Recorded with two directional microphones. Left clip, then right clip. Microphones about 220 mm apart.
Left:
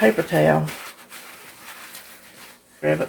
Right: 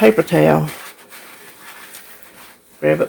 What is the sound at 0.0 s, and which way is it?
Speech, 55° right (ahead or behind).